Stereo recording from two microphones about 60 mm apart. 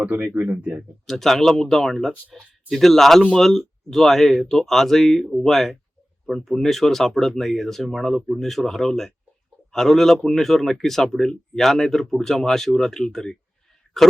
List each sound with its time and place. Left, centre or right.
0.0 s speech: right
1.0 s speech: centre